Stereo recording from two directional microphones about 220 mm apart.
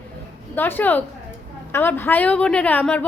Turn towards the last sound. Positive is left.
turn(degrees=5)  # may be behind; listen again after turning